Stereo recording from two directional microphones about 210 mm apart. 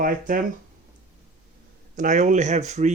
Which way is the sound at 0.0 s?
40° right (ahead or behind).